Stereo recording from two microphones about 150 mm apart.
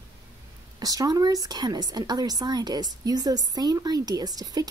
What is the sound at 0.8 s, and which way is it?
Speech, 25° right (ahead or behind).